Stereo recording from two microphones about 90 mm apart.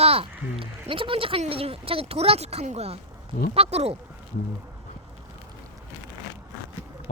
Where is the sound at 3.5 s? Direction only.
90° right.